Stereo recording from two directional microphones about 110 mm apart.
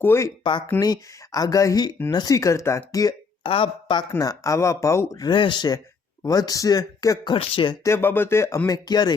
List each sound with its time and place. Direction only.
0.0 s speech: 20° left (ahead or behind)
0.8 s speech: 35° left (ahead or behind)
3.4 s speech: 50° left (ahead or behind)
4.2 s speech: 30° left (ahead or behind)
5.3 s speech: 45° left (ahead or behind)
7.3 s speech: 50° left (ahead or behind)
7.9 s speech: 20° left (ahead or behind); by 9.1 s 40° left (ahead or behind)